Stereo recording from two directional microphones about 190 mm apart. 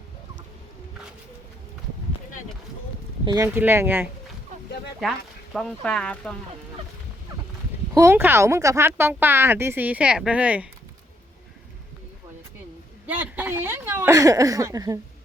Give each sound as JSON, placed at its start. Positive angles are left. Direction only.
{"t": 3.2, "sound": "speech", "side_deg": -15}
{"t": 5.5, "sound": "speech", "side_deg": 5}
{"t": 7.9, "sound": "speech", "side_deg": -15}
{"t": 13.1, "sound": "speech", "side_deg": -10}